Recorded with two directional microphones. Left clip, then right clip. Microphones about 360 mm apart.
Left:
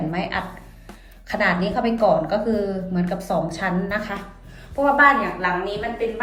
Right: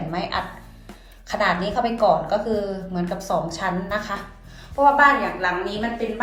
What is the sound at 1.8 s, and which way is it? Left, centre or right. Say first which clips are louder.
Speech: even; right.